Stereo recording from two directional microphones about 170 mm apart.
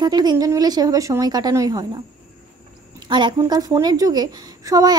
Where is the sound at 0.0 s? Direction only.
25° right (ahead or behind).